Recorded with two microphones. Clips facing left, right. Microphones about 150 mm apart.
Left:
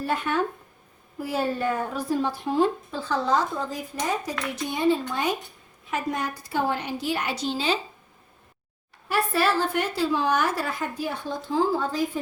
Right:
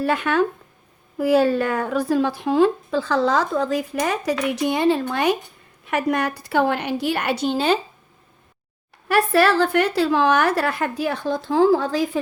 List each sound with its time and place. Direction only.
0.0 s a woman's voice: 90° right; by 7.8 s 55° right (ahead or behind)
9.0 s a woman's voice: 75° right (ahead or behind)